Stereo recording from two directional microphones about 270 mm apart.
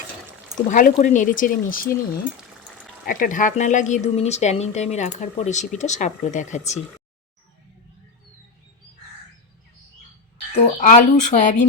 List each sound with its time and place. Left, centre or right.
0.7 s speech: left
3.1 s speech: left
10.6 s speech: left